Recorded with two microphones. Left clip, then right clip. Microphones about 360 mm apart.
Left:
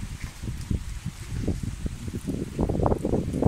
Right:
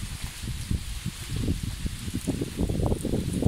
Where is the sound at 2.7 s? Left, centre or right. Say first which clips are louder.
Left 7 dB; left.